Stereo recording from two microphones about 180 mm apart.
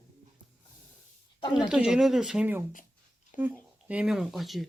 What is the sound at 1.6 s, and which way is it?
Speech, 5° right (ahead or behind).